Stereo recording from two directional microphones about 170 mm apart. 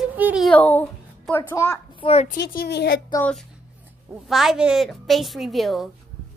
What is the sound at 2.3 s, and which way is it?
Speech, 75° left (ahead or behind).